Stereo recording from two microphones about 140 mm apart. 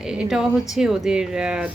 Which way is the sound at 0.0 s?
5° right (ahead or behind).